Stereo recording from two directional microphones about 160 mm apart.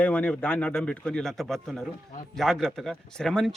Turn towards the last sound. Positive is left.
turn(degrees=5)  # may be behind; listen again after turning